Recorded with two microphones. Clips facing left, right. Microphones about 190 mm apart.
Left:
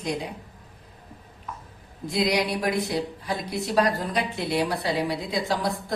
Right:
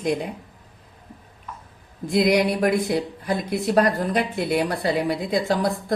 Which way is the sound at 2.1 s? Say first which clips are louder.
Right 5 dB; 50° right (ahead or behind).